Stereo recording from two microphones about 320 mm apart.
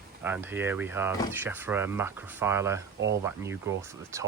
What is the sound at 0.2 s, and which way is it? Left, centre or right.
Speech, centre.